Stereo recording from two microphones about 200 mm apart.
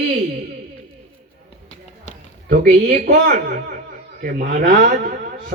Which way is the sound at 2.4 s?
45° right (ahead or behind).